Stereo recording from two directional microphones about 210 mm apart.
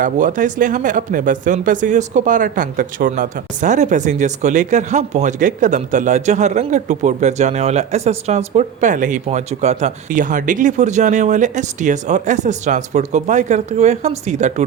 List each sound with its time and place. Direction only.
0.0 s speech: 40° right (ahead or behind)